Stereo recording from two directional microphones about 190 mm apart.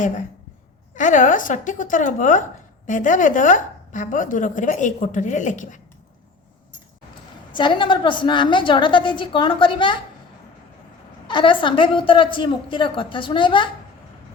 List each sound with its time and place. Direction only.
0.9 s speech: 40° left (ahead or behind)
7.5 s a woman's voice: 25° left (ahead or behind)
11.3 s a woman's voice: 25° left (ahead or behind)